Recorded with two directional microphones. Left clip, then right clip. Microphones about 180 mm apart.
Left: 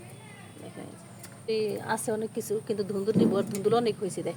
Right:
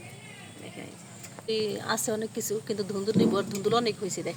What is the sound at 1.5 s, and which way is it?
A woman's voice, 10° left (ahead or behind).